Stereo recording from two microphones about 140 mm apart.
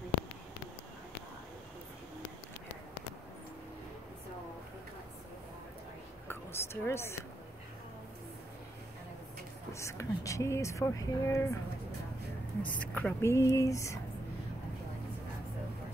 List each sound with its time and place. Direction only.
6.2 s a sound: 15° left (ahead or behind)
9.7 s speech: 20° left (ahead or behind)
12.6 s speech: 10° left (ahead or behind)